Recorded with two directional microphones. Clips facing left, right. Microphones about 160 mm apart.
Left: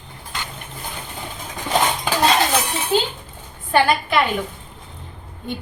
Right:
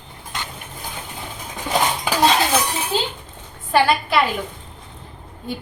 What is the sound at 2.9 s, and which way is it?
Dishes, 35° right (ahead or behind).